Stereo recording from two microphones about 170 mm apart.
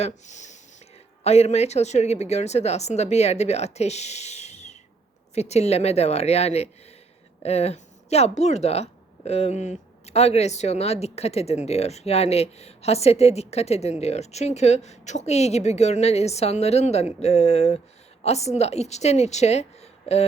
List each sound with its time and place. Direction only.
0.0 s speech: 45° left (ahead or behind)